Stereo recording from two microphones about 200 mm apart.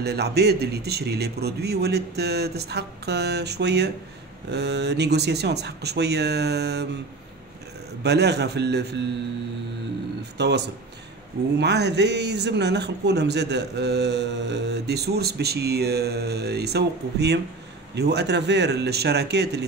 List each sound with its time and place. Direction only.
0.0 s speech: 55° right (ahead or behind)
8.0 s speech: 55° right (ahead or behind)
10.3 s speech: 55° right (ahead or behind)